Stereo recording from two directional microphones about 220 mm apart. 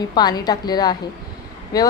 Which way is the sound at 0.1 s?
20° left (ahead or behind).